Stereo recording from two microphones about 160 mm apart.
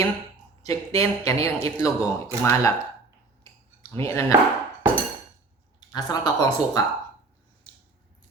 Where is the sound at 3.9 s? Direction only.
20° left (ahead or behind).